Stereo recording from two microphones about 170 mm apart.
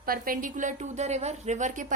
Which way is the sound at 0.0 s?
55° right (ahead or behind).